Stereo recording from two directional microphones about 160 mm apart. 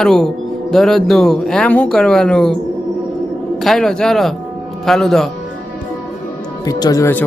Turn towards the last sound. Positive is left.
turn(degrees=15)  # may be behind; listen again after turning